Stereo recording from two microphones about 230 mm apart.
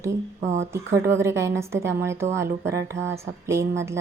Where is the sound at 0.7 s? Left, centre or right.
Centre.